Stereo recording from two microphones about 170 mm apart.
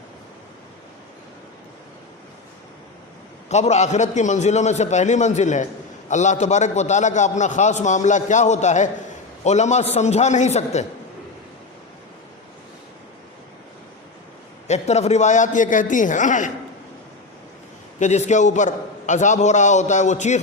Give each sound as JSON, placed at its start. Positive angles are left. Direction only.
{"t": 3.5, "sound": "a man's voice", "side_deg": 40}
{"t": 14.7, "sound": "a man's voice", "side_deg": 40}
{"t": 18.0, "sound": "a man's voice", "side_deg": 45}